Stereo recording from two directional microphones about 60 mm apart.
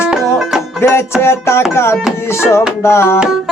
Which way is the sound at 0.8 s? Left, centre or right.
Left.